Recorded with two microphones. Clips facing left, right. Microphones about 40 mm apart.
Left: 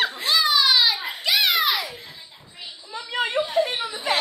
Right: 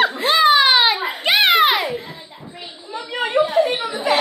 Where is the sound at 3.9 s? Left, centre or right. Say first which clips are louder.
Right 6 dB; right.